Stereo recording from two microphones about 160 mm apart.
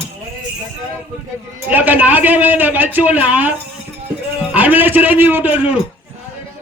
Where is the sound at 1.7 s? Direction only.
10° right (ahead or behind).